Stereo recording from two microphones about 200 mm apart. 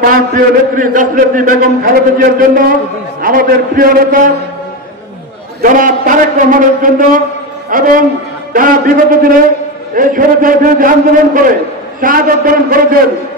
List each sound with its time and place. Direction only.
0.0 s a man's voice: 45° right (ahead or behind)
5.6 s a man's voice: 40° right (ahead or behind)